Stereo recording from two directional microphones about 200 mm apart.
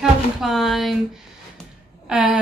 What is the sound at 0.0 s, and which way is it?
Speech, centre (ahead or behind).